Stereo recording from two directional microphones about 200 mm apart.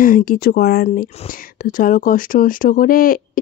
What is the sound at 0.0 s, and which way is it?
Speech, 45° left (ahead or behind).